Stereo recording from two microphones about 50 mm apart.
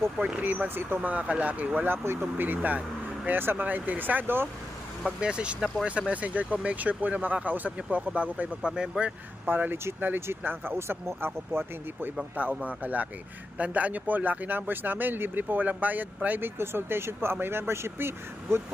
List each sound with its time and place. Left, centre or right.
0.4 s speech: right
1.1 s speech: right
1.9 s speech: right
2.4 s speech: right
3.2 s speech: right
5.0 s speech: centre
5.5 s speech: centre
5.8 s speech: right
9.5 s speech: right
10.2 s speech: right
12.6 s speech: right
16.6 s speech: right